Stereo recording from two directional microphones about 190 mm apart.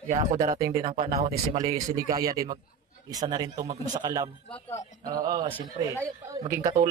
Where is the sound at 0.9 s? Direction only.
40° right (ahead or behind).